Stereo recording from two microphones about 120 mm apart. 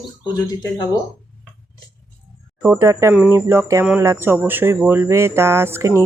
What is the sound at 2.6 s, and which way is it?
Speech, 20° right (ahead or behind).